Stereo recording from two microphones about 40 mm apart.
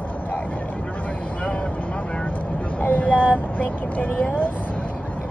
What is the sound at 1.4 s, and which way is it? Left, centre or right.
Vehicle, left.